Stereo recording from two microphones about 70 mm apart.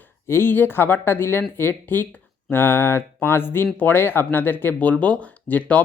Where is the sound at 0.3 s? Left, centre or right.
Left.